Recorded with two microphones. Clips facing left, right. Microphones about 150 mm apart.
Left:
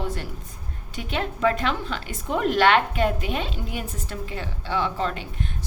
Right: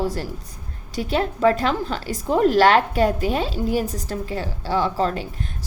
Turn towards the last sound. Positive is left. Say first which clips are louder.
# right 5 dB
turn(degrees=-40)  # may be behind; listen again after turning